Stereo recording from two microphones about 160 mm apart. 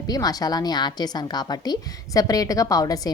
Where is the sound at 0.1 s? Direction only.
25° left (ahead or behind).